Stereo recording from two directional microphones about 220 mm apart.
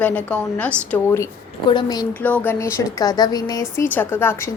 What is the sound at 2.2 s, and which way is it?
A woman's voice, 10° left (ahead or behind).